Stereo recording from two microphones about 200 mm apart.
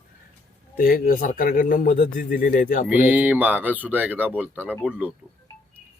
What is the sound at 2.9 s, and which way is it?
Speech, 10° right (ahead or behind).